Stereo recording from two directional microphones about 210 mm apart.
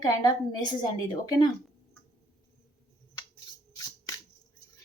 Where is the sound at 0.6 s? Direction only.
20° left (ahead or behind).